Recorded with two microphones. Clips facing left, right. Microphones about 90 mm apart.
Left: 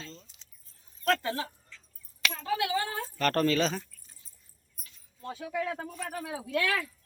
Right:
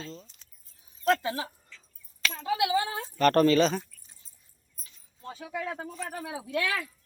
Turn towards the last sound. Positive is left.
turn(degrees=-5)  # may be behind; listen again after turning